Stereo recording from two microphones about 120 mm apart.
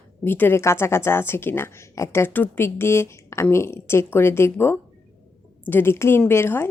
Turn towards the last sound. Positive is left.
turn(degrees=20)  # may be behind; listen again after turning